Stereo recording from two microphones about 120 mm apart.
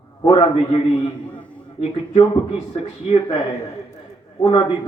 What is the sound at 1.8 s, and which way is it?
Speech, 50° left (ahead or behind).